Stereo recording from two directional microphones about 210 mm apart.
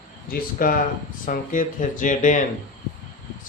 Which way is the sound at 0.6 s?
40° left (ahead or behind).